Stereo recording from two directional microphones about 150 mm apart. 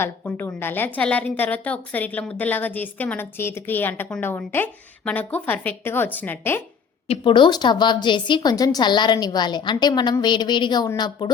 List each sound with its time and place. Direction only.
0.0 s a woman's voice: 15° left (ahead or behind)
7.1 s a woman's voice: 35° left (ahead or behind)